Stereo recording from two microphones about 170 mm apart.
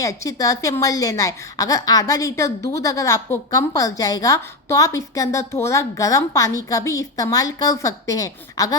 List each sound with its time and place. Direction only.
0.0 s a woman's voice: 20° left (ahead or behind)